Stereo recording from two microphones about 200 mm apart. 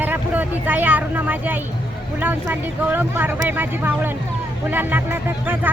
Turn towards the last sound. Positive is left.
turn(degrees=-10)  # may be behind; listen again after turning